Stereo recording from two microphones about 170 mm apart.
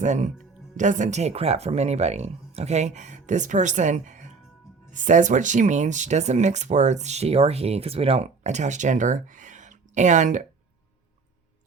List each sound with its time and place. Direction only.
0.0 s speech: 45° right (ahead or behind)